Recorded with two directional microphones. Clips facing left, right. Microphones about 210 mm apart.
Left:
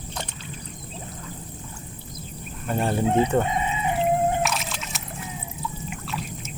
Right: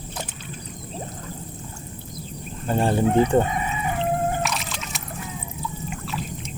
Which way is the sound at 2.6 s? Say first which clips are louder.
Right 3 dB; 30° right (ahead or behind).